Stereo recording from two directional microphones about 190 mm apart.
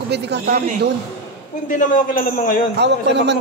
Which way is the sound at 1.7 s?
45° left (ahead or behind).